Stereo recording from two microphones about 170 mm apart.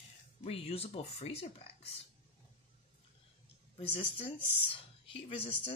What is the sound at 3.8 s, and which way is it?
A woman's voice, 30° left (ahead or behind).